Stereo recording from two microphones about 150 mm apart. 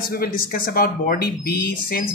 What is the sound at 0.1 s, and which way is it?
Speech, 75° left (ahead or behind).